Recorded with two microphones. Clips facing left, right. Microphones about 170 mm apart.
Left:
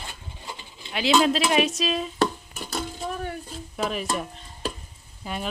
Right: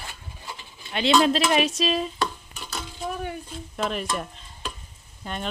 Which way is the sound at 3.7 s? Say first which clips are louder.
Even; 5° left (ahead or behind).